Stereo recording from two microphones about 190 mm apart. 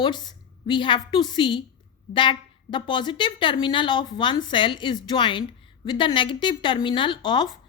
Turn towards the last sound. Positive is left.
turn(degrees=25)  # may be behind; listen again after turning